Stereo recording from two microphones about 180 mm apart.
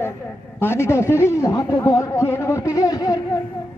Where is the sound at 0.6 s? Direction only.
15° left (ahead or behind).